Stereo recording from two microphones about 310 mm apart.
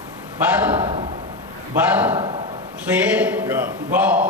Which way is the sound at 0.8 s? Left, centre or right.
Centre.